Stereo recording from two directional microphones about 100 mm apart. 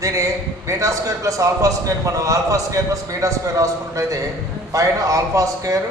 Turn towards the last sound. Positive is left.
turn(degrees=-30)  # may be behind; listen again after turning